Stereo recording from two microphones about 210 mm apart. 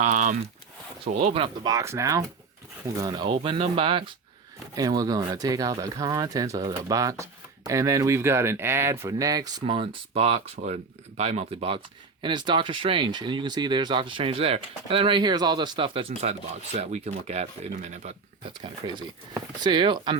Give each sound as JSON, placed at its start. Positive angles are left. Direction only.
{"t": 0.0, "sound": "speech", "side_deg": -35}